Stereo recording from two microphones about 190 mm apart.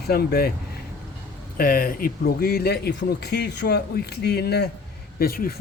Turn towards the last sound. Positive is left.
turn(degrees=50)  # may be behind; listen again after turning